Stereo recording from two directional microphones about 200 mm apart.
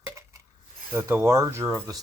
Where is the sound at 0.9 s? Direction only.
15° right (ahead or behind).